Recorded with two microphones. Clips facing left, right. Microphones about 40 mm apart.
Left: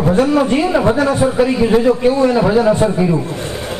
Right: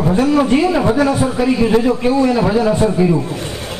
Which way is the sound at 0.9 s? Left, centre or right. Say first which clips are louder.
Even; left.